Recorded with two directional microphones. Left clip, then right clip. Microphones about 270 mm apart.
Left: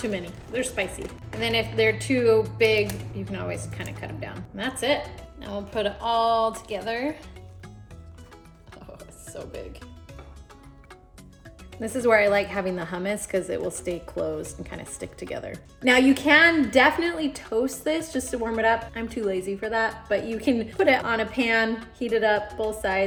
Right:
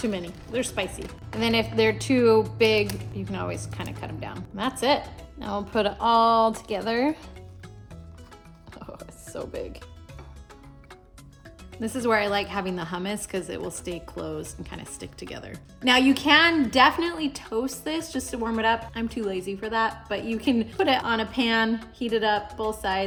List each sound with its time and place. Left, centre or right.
0.0 s speech: centre
9.3 s speech: right
11.8 s a woman's voice: centre